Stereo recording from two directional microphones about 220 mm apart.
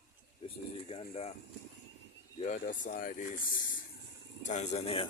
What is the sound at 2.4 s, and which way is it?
Speech, 35° left (ahead or behind).